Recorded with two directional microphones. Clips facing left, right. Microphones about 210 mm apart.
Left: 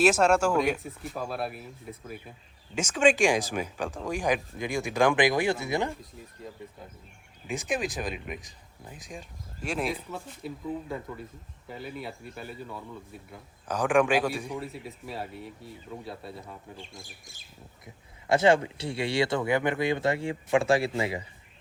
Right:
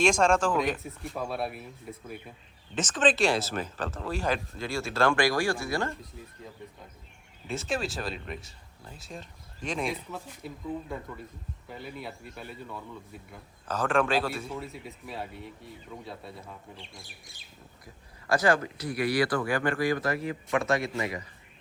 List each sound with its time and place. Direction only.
0.0 s speech: 5° left (ahead or behind)
2.7 s speech: 10° left (ahead or behind)
7.4 s speech: 15° left (ahead or behind)
13.7 s speech: 15° left (ahead or behind)
14.6 s speech: centre (ahead or behind)
17.0 s speech: 45° left (ahead or behind)
17.8 s speech: 25° left (ahead or behind)